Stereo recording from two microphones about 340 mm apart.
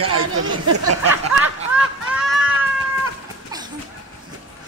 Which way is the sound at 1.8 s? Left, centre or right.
Centre.